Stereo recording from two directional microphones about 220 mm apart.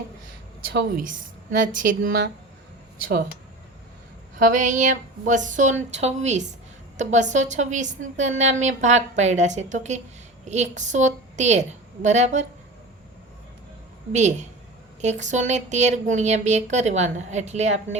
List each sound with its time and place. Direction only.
0.7 s a woman's voice: 45° right (ahead or behind)
4.4 s a woman's voice: 35° right (ahead or behind)
14.1 s a woman's voice: 30° right (ahead or behind)